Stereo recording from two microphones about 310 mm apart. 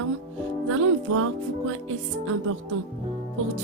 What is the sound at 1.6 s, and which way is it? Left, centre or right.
Music, right.